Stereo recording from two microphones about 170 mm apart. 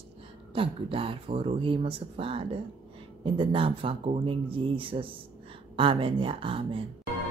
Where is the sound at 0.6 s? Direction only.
30° right (ahead or behind).